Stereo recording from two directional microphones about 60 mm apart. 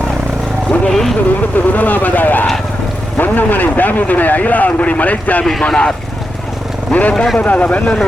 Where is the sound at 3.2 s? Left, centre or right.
Left.